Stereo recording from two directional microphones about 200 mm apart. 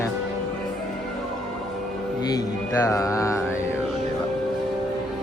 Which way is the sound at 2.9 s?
15° left (ahead or behind).